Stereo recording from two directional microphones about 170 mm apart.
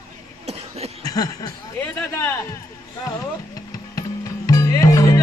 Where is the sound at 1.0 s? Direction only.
20° left (ahead or behind).